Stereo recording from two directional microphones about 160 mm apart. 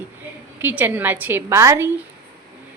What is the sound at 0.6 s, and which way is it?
A woman's voice, 10° right (ahead or behind).